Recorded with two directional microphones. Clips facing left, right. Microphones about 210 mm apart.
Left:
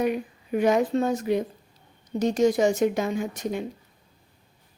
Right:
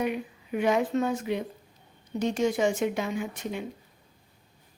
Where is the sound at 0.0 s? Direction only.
40° left (ahead or behind).